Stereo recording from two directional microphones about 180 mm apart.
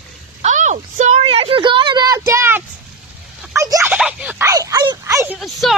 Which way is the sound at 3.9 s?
5° right (ahead or behind).